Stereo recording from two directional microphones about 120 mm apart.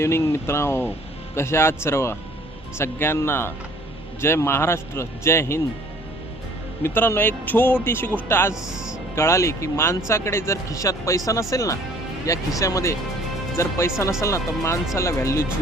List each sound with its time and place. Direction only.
0.0 s speech: 20° left (ahead or behind)
6.8 s speech: 20° left (ahead or behind)
8.6 s speech: 5° right (ahead or behind)
9.1 s speech: 25° left (ahead or behind)